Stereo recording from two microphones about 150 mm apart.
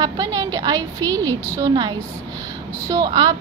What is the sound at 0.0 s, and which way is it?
A woman's voice, 25° right (ahead or behind).